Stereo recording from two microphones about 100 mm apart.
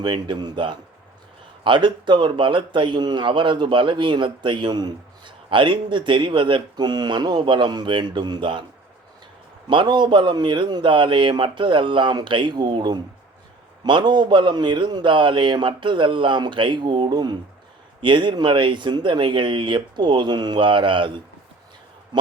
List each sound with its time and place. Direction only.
0.0 s speech: 50° right (ahead or behind)
9.6 s speech: 50° right (ahead or behind)